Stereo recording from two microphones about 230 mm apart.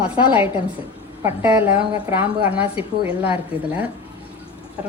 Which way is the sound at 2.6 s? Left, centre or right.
Left.